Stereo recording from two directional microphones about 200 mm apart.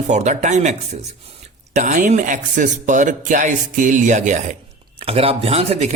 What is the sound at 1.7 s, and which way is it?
Speech, 40° right (ahead or behind).